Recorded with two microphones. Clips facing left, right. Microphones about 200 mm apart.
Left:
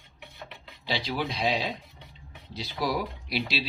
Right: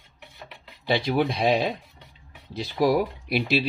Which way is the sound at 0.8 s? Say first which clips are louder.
Right 8 dB; 55° right (ahead or behind).